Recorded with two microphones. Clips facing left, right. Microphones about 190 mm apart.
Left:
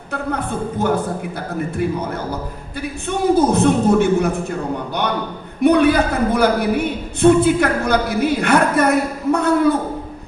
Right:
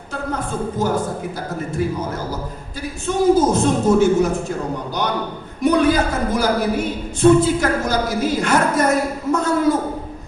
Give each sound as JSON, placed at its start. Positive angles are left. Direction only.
{"t": 0.1, "sound": "a sound", "side_deg": 60}
{"t": 1.8, "sound": "a woman's voice", "side_deg": 60}
{"t": 3.1, "sound": "a woman's voice", "side_deg": 60}
{"t": 5.6, "sound": "a woman's voice", "side_deg": 60}